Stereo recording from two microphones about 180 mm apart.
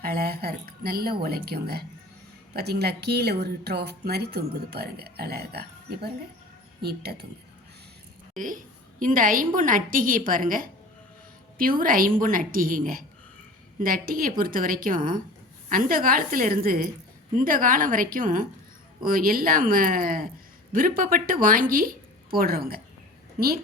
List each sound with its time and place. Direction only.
0.0 s speech: 55° right (ahead or behind)
9.0 s a woman's voice: 50° right (ahead or behind)